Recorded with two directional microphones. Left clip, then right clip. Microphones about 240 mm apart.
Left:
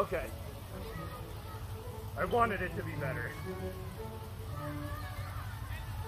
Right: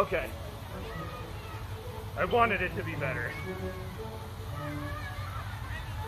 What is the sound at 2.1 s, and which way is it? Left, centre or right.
Speech, centre.